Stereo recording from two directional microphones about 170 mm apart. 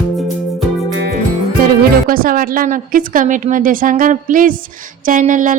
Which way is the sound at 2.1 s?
55° right (ahead or behind).